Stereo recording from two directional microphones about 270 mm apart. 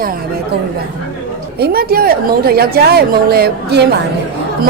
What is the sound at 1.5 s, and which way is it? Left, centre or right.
A woman's voice, right.